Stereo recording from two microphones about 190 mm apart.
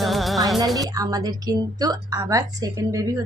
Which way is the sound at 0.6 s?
20° right (ahead or behind).